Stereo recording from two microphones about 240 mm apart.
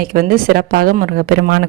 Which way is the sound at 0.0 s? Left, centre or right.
Right.